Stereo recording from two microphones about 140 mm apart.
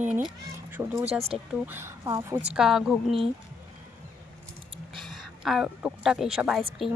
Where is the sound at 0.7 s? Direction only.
15° right (ahead or behind).